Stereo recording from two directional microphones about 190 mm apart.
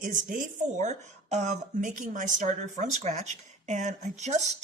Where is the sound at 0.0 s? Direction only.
45° right (ahead or behind).